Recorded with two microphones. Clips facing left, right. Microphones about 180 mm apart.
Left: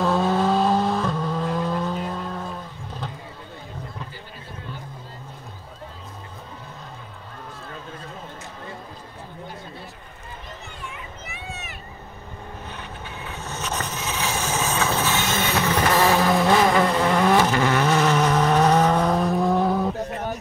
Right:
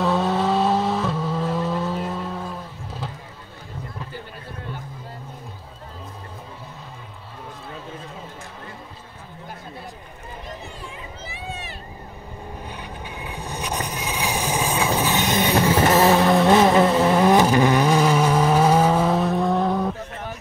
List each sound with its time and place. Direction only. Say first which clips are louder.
0.0 s vehicle: even; centre (ahead or behind)
10.9 s a sound: right 1 dB; 30° right (ahead or behind)
12.6 s vehicle: right 2 dB; 10° right (ahead or behind)
16.1 s vehicle: right 3 dB; centre (ahead or behind)
17.2 s vehicle: right 3 dB; 20° right (ahead or behind); by 19.9 s centre (ahead or behind)